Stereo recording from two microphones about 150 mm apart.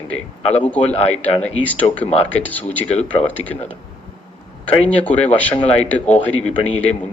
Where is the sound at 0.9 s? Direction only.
45° left (ahead or behind).